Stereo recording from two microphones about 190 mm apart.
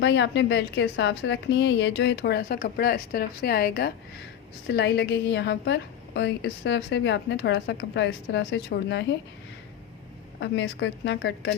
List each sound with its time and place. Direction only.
0.0 s a woman's voice: 70° left (ahead or behind)
10.4 s a woman's voice: 70° left (ahead or behind)